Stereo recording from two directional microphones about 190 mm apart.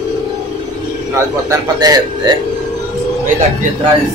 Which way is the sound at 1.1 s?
15° right (ahead or behind).